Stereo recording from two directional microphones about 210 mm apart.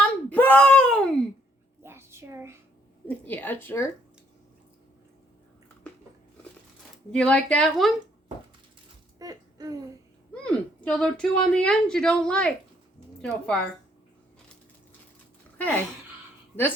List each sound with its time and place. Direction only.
0.0 s wail: 5° left (ahead or behind)
1.8 s a sound: 10° right (ahead or behind)
3.1 s a woman's voice: 10° left (ahead or behind)
7.1 s speech: 5° left (ahead or behind)
9.1 s a sound: 15° right (ahead or behind)
10.4 s speech: 5° left (ahead or behind)
15.5 s speech: 10° left (ahead or behind)